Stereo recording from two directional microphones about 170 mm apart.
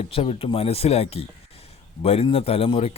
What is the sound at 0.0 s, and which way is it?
A man's voice, 35° left (ahead or behind).